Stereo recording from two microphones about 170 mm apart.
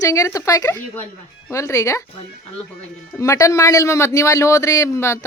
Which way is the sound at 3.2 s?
20° left (ahead or behind).